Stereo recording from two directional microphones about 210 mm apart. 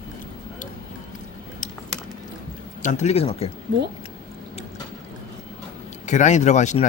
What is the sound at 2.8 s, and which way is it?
Speech, 30° left (ahead or behind).